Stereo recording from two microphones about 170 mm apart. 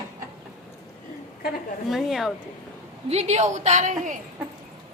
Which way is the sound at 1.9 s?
Centre (ahead or behind).